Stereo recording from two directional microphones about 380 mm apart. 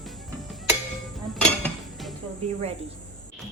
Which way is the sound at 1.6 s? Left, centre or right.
Centre.